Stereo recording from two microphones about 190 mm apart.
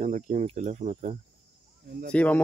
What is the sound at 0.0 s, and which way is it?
Speech, 40° right (ahead or behind).